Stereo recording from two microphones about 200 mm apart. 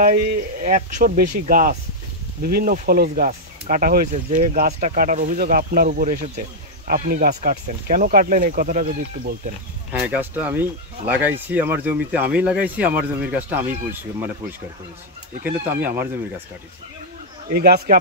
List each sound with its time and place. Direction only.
0.0 s speech: 40° right (ahead or behind)
6.9 s speech: 50° right (ahead or behind)
9.9 s speech: 5° right (ahead or behind)
15.4 s speech: 10° right (ahead or behind)
17.5 s speech: 50° right (ahead or behind)